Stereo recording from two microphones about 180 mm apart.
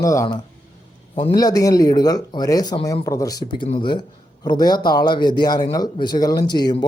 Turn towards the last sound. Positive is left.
turn(degrees=25)  # may be behind; listen again after turning